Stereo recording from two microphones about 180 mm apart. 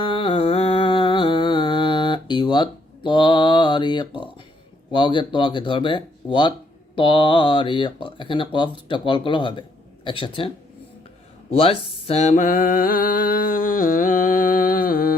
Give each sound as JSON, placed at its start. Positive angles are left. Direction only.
{"t": 0.0, "sound": "music", "side_deg": 30}
{"t": 4.9, "sound": "speech", "side_deg": 25}
{"t": 11.5, "sound": "a sound", "side_deg": 30}